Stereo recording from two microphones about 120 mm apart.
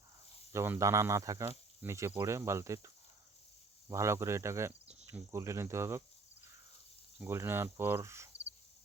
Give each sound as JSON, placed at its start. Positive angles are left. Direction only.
{"t": 0.5, "sound": "speech", "side_deg": -20}
{"t": 7.2, "sound": "speech", "side_deg": -20}